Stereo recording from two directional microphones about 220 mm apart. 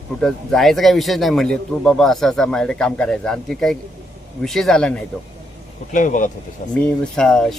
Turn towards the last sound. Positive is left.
turn(degrees=5)  # may be behind; listen again after turning